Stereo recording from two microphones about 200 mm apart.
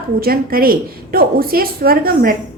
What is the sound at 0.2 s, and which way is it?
A woman's voice, 45° right (ahead or behind).